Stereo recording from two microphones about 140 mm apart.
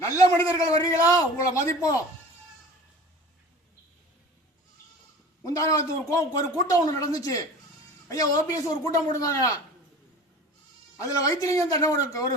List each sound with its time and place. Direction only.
0.0 s a man's voice: 20° left (ahead or behind)
5.4 s a man's voice: 25° left (ahead or behind)
10.9 s a man's voice: 25° left (ahead or behind)